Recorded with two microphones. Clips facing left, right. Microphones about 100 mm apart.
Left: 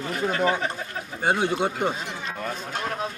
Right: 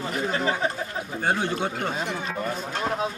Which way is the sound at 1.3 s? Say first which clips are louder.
Left 3 dB; 15° left (ahead or behind).